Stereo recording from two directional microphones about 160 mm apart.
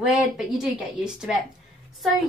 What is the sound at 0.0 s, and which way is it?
Speech, 5° right (ahead or behind).